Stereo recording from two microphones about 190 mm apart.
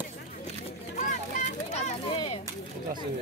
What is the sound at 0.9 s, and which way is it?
Children playing, 40° left (ahead or behind).